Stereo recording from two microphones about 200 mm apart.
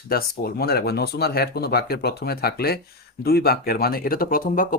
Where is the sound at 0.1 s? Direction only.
50° left (ahead or behind).